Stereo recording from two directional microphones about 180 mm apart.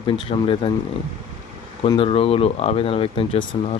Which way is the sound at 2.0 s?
30° left (ahead or behind).